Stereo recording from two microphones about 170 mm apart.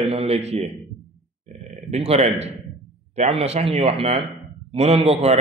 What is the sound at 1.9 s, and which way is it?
A man's voice, 40° right (ahead or behind).